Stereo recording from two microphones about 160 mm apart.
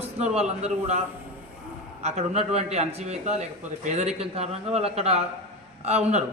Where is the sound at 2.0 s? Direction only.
40° right (ahead or behind).